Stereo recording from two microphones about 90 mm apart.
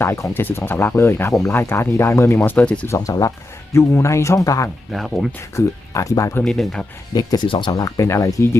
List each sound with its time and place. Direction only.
0.0 s speech: 30° left (ahead or behind)
2.8 s speech: 35° left (ahead or behind)
4.9 s speech: centre (ahead or behind)
5.5 s speech: 35° left (ahead or behind)
6.4 s speech: 5° left (ahead or behind)
7.1 s speech: 45° left (ahead or behind)
7.4 s speech: 65° left (ahead or behind)
7.7 s speech: 45° left (ahead or behind)